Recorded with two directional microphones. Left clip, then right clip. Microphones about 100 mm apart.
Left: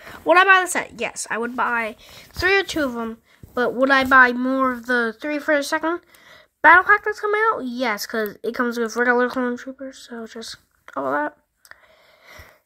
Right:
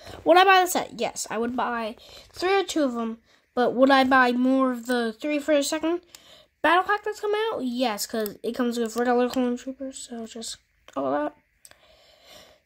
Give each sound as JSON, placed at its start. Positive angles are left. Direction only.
{"t": 0.3, "sound": "a woman's voice", "side_deg": -15}
{"t": 1.8, "sound": "a woman's voice", "side_deg": 0}
{"t": 4.4, "sound": "speech", "side_deg": -25}
{"t": 4.6, "sound": "speech", "side_deg": -5}